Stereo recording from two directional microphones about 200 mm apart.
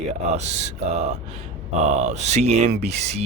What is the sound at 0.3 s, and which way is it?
Speech, 35° right (ahead or behind).